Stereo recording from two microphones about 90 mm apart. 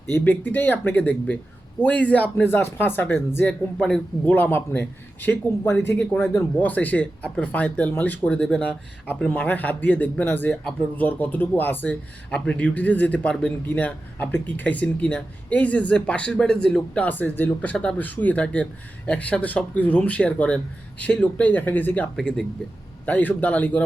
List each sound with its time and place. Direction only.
0.1 s speech: 20° left (ahead or behind)
3.8 s a man's voice: 5° left (ahead or behind)
4.3 s a man's voice: 20° left (ahead or behind)
18.0 s a man's voice: 20° left (ahead or behind)
22.1 s a man's voice: 5° left (ahead or behind)
23.0 s a man's voice: 15° left (ahead or behind)